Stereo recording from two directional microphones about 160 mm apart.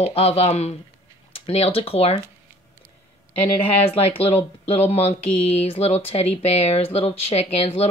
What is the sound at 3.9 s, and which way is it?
Speech, 35° left (ahead or behind).